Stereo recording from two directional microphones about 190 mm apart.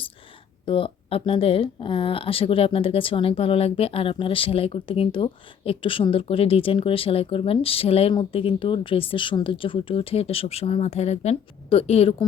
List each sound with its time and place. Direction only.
0.6 s speech: 30° left (ahead or behind)